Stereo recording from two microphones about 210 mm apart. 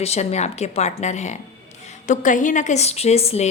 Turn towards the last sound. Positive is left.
turn(degrees=30)  # may be behind; listen again after turning